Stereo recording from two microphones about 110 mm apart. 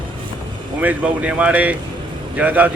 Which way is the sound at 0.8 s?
15° right (ahead or behind).